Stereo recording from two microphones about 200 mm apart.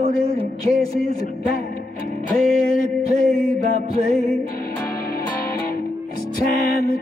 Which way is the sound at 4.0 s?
45° left (ahead or behind).